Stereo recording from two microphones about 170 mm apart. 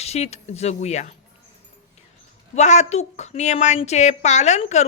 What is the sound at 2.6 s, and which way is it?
A woman's voice, 45° left (ahead or behind).